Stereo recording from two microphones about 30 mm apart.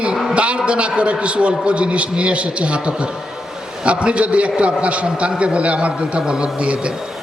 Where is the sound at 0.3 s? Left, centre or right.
Right.